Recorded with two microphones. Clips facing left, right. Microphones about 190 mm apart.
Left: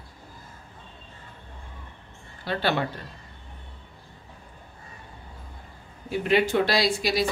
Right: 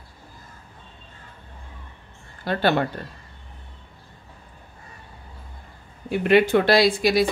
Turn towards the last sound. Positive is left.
turn(degrees=-55)  # may be behind; listen again after turning